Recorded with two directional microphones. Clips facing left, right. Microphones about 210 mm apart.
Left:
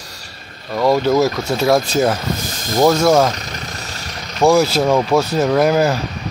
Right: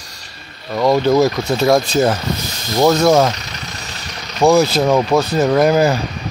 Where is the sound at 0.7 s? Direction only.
5° left (ahead or behind).